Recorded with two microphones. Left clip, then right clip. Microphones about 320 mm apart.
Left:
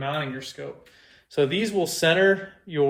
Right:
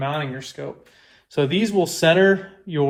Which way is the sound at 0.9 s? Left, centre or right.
Centre.